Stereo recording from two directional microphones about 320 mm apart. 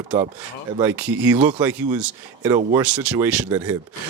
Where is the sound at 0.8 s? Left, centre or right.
Centre.